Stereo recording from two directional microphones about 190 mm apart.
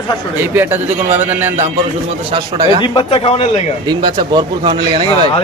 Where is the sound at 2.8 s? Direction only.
25° left (ahead or behind).